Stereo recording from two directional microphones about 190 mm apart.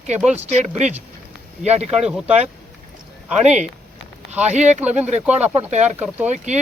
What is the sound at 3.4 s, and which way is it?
Speech, 35° right (ahead or behind).